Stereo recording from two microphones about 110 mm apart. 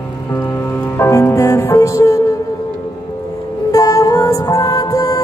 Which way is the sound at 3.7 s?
35° left (ahead or behind).